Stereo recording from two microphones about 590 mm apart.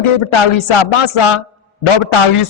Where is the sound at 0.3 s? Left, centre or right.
Left.